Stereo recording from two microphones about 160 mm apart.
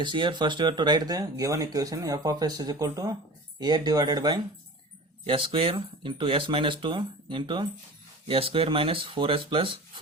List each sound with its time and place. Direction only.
0.0 s speech: 30° right (ahead or behind)